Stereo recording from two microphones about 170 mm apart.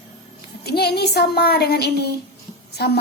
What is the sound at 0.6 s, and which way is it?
A woman's voice, 70° left (ahead or behind).